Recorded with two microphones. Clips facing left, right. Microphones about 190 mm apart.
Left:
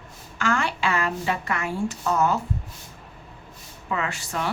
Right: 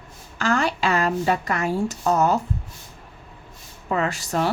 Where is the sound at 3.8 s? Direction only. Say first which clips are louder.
Right 5 dB; 40° right (ahead or behind).